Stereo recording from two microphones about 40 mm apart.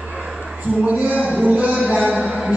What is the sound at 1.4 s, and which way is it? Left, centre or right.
Speech, right.